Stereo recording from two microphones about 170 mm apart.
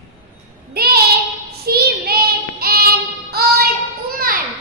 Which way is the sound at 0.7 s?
65° right (ahead or behind).